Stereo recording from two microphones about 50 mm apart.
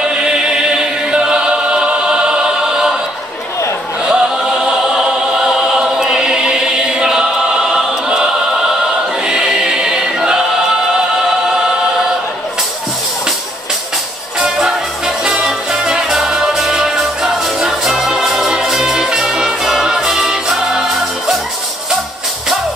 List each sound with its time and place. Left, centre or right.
0.0 s chant: centre
2.0 s choir: centre
4.0 s choir: centre
5.5 s choir: centre
9.4 s choir: centre
15.2 s music: centre